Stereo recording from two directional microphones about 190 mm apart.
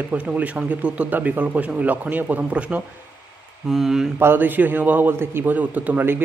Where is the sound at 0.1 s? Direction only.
5° right (ahead or behind).